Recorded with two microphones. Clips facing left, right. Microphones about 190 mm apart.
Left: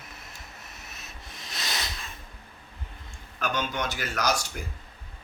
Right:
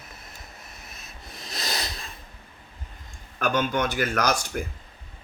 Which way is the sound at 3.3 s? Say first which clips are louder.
Right 6 dB; 50° right (ahead or behind).